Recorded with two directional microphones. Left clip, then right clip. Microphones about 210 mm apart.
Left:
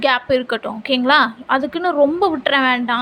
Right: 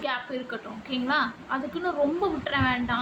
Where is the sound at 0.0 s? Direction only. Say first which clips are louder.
Left 14 dB; 50° left (ahead or behind).